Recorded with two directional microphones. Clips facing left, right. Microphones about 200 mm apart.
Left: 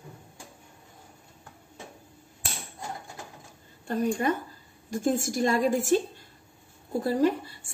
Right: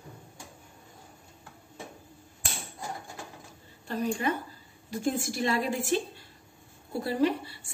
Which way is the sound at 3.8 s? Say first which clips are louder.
Left 3 dB; 45° left (ahead or behind).